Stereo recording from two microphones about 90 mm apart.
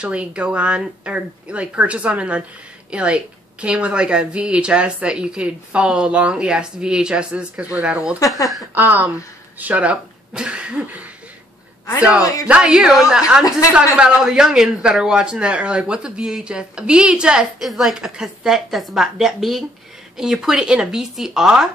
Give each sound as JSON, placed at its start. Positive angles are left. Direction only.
{"t": 0.0, "sound": "a man's voice", "side_deg": -10}
{"t": 12.2, "sound": "speech", "side_deg": 40}
{"t": 12.4, "sound": "a man's voice", "side_deg": -10}